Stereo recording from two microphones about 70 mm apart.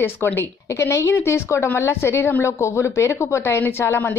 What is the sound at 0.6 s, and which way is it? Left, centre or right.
A woman's voice, left.